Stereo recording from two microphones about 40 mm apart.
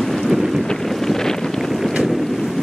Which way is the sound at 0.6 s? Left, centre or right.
Centre.